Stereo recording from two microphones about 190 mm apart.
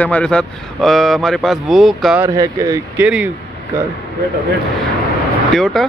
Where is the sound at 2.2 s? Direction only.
15° right (ahead or behind).